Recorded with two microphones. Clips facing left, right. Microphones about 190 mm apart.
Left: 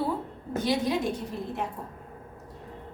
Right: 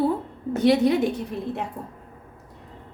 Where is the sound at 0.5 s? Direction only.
65° right (ahead or behind).